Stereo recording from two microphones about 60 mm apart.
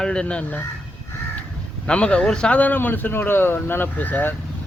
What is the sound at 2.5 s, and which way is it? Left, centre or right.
Speech, left.